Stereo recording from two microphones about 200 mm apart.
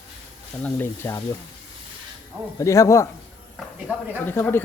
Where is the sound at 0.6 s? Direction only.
10° left (ahead or behind).